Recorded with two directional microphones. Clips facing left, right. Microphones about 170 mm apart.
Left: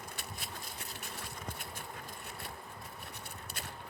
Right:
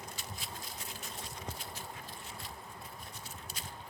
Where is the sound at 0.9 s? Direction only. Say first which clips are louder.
Even; 65° left (ahead or behind).